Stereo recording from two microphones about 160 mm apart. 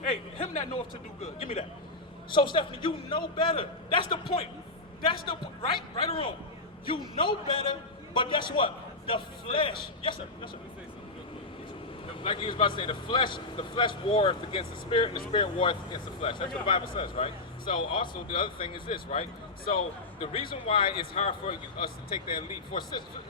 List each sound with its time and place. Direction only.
0.0 s a sound: 55° left (ahead or behind)
1.2 s a man's voice: 45° left (ahead or behind)
2.3 s a man's voice: 30° left (ahead or behind)
12.2 s a man's voice: 30° left (ahead or behind)
20.3 s a man's voice: 35° left (ahead or behind)